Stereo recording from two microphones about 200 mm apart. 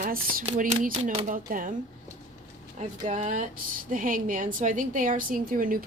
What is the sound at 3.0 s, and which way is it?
A woman's voice, 35° right (ahead or behind).